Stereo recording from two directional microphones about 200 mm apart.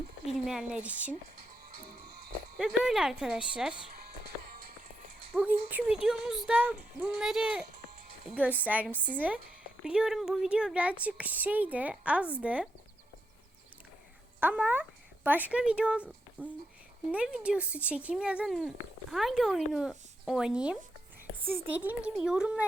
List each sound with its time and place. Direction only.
0.3 s speech: 5° right (ahead or behind)
2.6 s speech: centre (ahead or behind)
4.0 s music: 50° right (ahead or behind)
5.3 s speech: 5° right (ahead or behind)
14.4 s speech: 10° right (ahead or behind)